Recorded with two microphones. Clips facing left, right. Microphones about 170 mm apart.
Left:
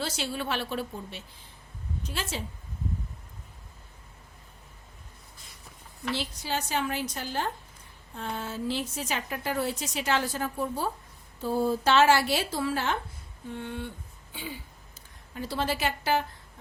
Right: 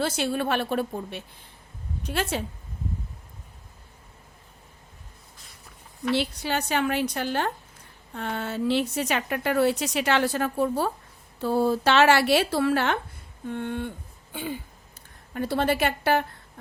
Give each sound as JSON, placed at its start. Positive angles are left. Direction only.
{"t": 0.0, "sound": "a woman's voice", "side_deg": -55}
{"t": 6.1, "sound": "a woman's voice", "side_deg": -65}
{"t": 13.5, "sound": "a woman's voice", "side_deg": -55}